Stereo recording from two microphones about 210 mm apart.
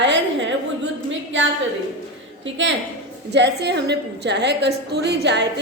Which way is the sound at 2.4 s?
60° right (ahead or behind).